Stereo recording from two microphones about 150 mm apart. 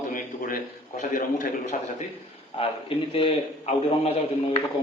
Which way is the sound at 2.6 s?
40° left (ahead or behind).